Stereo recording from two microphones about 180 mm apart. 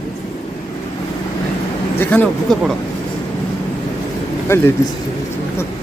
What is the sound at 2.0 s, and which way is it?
Speech, 10° left (ahead or behind).